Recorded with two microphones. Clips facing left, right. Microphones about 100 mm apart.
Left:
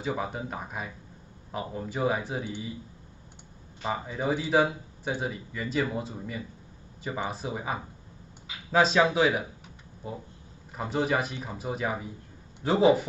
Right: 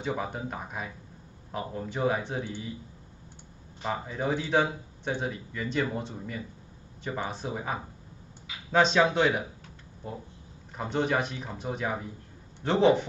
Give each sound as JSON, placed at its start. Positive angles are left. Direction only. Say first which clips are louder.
{"t": 0.0, "sound": "a man's voice", "louder": "left 1 dB", "side_deg": 0}
{"t": 3.8, "sound": "a man's voice", "louder": "left 1 dB", "side_deg": 5}